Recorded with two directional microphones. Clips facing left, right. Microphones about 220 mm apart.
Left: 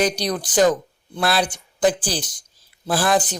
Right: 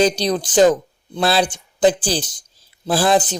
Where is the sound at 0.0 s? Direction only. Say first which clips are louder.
Right 4 dB; 25° right (ahead or behind).